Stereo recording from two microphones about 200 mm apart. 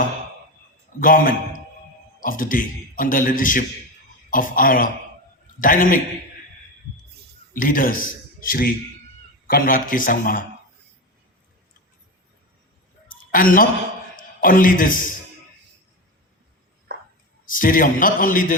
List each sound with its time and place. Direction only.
0.9 s a man's voice: 45° left (ahead or behind)
7.5 s a man's voice: 45° left (ahead or behind)
13.1 s a sound: 45° left (ahead or behind)
14.2 s a man's voice: 45° left (ahead or behind)
16.9 s a sound: 55° right (ahead or behind)
17.4 s a man's voice: 45° left (ahead or behind)